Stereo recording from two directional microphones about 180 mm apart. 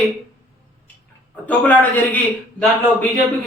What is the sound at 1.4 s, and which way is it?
A man's voice, 10° left (ahead or behind).